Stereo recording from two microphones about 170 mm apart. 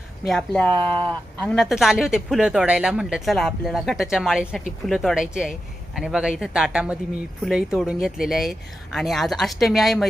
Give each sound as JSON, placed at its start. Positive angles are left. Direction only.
{"t": 0.3, "sound": "speech", "side_deg": 5}
{"t": 0.6, "sound": "speech", "side_deg": -25}
{"t": 1.4, "sound": "speech", "side_deg": 5}